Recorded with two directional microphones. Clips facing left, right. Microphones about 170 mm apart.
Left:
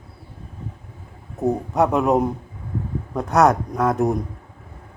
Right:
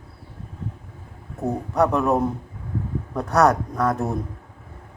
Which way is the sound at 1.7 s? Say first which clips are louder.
Left 1 dB; 20° left (ahead or behind).